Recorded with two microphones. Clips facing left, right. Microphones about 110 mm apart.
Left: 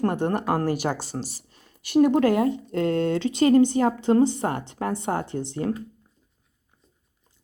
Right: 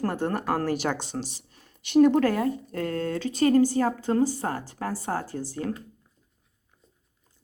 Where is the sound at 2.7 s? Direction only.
25° left (ahead or behind).